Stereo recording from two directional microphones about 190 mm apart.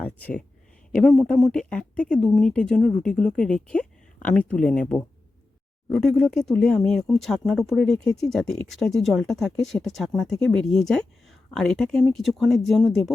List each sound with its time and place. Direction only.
0.0 s speech: 10° left (ahead or behind)